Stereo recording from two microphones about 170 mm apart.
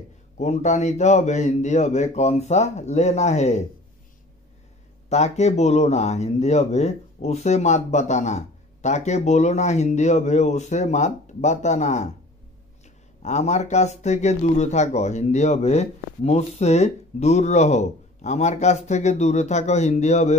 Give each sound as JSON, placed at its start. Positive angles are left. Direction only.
{"t": 0.4, "sound": "a man's voice", "side_deg": 40}
{"t": 5.1, "sound": "a man's voice", "side_deg": 40}